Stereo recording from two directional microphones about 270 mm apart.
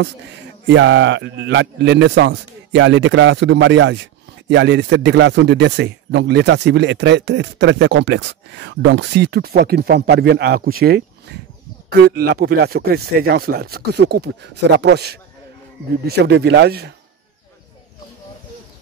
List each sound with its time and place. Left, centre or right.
0.7 s speech: right